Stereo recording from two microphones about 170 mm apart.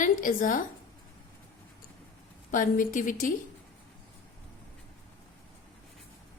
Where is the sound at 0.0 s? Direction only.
50° left (ahead or behind).